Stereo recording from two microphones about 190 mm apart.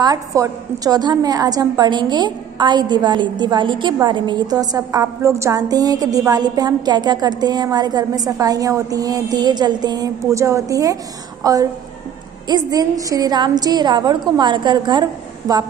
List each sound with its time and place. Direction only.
0.0 s a woman's voice: 20° right (ahead or behind)